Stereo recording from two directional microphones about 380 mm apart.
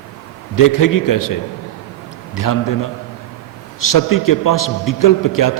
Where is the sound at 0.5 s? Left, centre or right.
Left.